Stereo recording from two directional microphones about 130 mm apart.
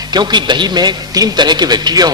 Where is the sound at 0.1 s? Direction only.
35° right (ahead or behind).